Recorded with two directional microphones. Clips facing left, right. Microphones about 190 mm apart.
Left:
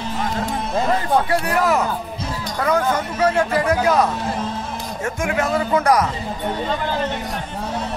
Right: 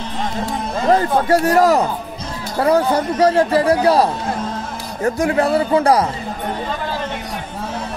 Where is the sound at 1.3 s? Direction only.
40° right (ahead or behind).